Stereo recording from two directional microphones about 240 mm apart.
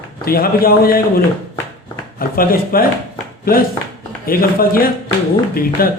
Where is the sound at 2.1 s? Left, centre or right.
Left.